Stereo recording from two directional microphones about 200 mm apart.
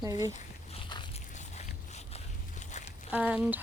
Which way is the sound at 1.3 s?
35° left (ahead or behind).